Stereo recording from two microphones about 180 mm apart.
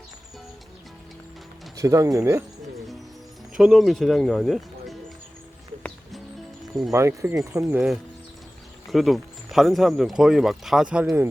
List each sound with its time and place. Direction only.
1.7 s bird: 20° right (ahead or behind)
3.6 s speech: centre (ahead or behind)
5.8 s music: centre (ahead or behind)
6.9 s speech: 15° right (ahead or behind)